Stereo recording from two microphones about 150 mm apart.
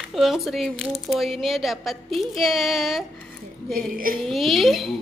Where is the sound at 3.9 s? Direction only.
70° right (ahead or behind).